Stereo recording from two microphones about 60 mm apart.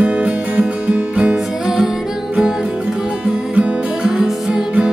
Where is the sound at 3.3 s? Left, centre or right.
Centre.